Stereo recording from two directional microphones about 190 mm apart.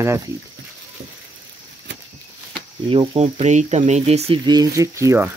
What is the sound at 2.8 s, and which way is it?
Speech, 30° right (ahead or behind).